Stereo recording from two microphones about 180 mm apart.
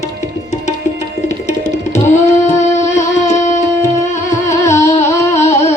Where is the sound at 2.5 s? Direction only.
40° left (ahead or behind).